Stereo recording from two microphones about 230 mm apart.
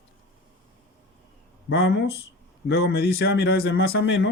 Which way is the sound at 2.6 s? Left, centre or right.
Left.